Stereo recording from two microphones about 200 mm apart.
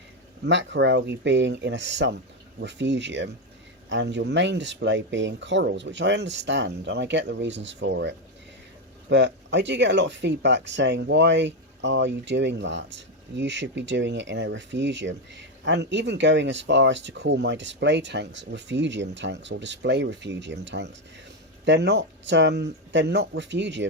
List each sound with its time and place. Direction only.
0.4 s speech: 65° right (ahead or behind)